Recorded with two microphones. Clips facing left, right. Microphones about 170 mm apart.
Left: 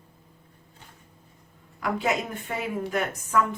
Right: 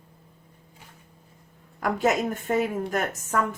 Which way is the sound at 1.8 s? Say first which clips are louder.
Right 3 dB; 45° right (ahead or behind).